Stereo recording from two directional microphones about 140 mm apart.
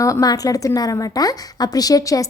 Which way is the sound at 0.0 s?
25° left (ahead or behind).